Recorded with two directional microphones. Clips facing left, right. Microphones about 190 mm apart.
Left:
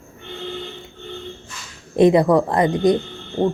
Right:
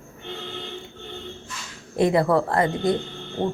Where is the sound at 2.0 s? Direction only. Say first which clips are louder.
Left 6 dB; 20° left (ahead or behind).